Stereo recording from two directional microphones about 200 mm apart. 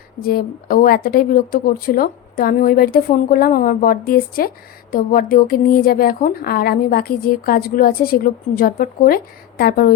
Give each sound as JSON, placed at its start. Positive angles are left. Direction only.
{"t": 0.2, "sound": "a woman's voice", "side_deg": 45}